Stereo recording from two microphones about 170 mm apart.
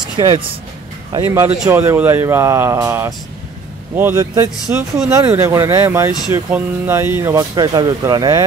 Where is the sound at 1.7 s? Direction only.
15° right (ahead or behind).